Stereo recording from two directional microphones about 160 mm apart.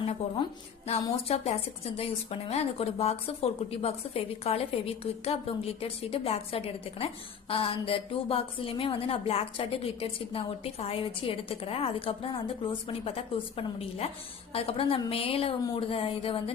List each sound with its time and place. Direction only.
1.3 s a woman's voice: 40° left (ahead or behind)